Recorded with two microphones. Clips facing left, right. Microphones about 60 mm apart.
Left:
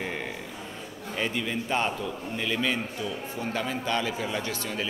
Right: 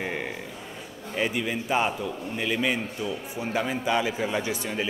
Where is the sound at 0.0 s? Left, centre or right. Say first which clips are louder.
Right 2 dB; centre.